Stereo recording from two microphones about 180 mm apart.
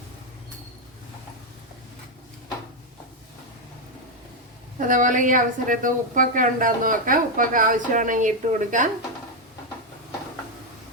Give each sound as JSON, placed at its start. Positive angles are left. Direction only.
{"t": 4.8, "sound": "a woman's voice", "side_deg": -45}